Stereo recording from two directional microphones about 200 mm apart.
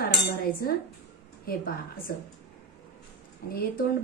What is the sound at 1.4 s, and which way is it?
Speech, 45° left (ahead or behind).